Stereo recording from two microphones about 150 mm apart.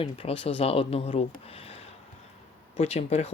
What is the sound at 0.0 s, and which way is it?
Speech, 35° left (ahead or behind).